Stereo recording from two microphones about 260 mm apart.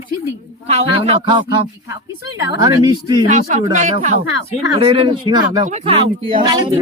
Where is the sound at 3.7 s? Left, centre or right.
Right.